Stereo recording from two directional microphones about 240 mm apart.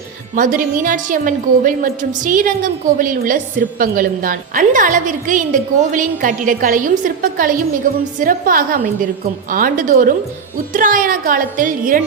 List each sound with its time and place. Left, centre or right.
0.3 s a woman's voice: right